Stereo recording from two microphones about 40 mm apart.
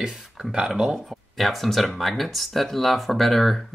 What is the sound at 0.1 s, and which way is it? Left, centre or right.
Speech, centre.